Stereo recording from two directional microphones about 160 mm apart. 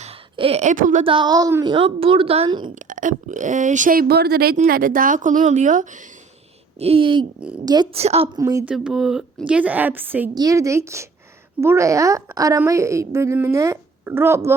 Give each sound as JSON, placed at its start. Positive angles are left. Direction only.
{"t": 0.0, "sound": "speech", "side_deg": -35}
{"t": 1.0, "sound": "a woman's voice", "side_deg": -30}
{"t": 1.7, "sound": "a woman's voice", "side_deg": -35}
{"t": 2.7, "sound": "speech", "side_deg": -55}
{"t": 4.5, "sound": "a woman's voice", "side_deg": -65}
{"t": 6.7, "sound": "a woman's voice", "side_deg": -35}
{"t": 7.9, "sound": "a woman's voice", "side_deg": -40}
{"t": 8.4, "sound": "a woman's voice", "side_deg": -20}
{"t": 8.6, "sound": "a woman's voice", "side_deg": -5}
{"t": 10.3, "sound": "a woman's voice", "side_deg": -20}